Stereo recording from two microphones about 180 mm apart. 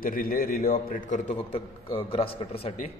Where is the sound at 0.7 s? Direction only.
40° left (ahead or behind).